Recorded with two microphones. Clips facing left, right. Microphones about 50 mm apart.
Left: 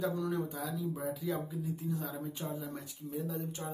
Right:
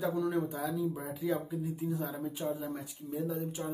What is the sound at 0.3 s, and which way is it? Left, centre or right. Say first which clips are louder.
Speech: right 3 dB; centre.